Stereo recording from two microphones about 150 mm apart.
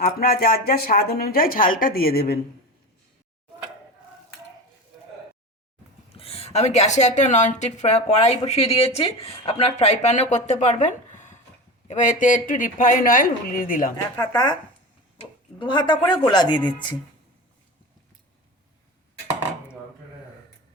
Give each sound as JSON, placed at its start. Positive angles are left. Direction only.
{"t": 0.0, "sound": "a woman's voice", "side_deg": 80}
{"t": 6.1, "sound": "a woman's voice", "side_deg": 40}
{"t": 14.2, "sound": "speech", "side_deg": 30}